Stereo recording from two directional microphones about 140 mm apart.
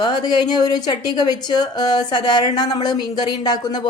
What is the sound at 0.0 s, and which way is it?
A woman's voice, 30° left (ahead or behind).